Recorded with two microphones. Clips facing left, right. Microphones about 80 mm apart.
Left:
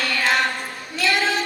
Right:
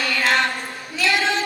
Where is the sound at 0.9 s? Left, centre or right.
Centre.